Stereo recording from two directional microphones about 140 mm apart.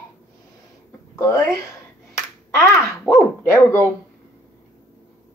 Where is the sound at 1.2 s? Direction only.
20° left (ahead or behind).